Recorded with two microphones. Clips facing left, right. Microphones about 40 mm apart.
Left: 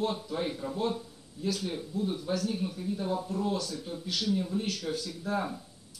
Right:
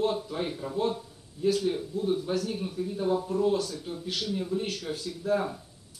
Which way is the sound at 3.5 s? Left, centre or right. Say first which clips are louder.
Right 4 dB; right.